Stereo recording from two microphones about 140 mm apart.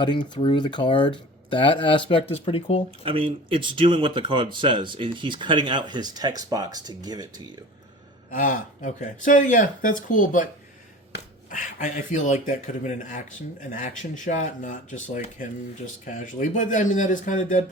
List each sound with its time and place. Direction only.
0.0 s speech: 35° left (ahead or behind)
3.0 s speech: 40° right (ahead or behind)
8.3 s speech: 70° left (ahead or behind)